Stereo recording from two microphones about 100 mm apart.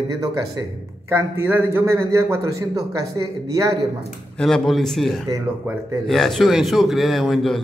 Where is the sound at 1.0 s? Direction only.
25° right (ahead or behind).